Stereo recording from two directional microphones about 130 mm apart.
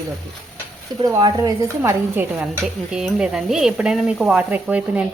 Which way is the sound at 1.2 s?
35° right (ahead or behind).